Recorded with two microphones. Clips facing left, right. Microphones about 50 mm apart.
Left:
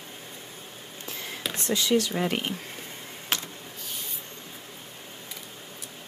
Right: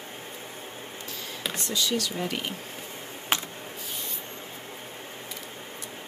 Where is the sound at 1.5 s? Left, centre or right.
Left.